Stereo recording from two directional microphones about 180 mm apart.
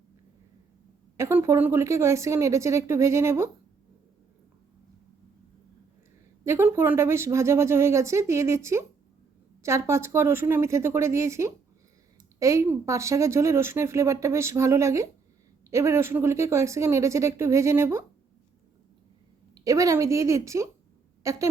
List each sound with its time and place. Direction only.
1.1 s speech: 15° right (ahead or behind)
6.4 s speech: 15° right (ahead or behind)
19.5 s speech: 20° right (ahead or behind)